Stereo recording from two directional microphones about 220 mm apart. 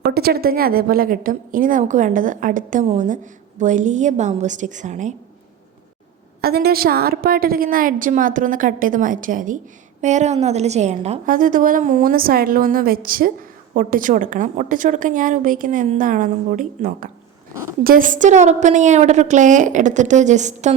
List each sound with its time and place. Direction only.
0.0 s a woman's voice: 45° right (ahead or behind)
6.4 s a woman's voice: 45° right (ahead or behind)